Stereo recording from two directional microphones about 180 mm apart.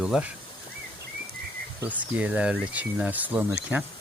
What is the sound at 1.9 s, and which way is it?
Speech, 10° right (ahead or behind).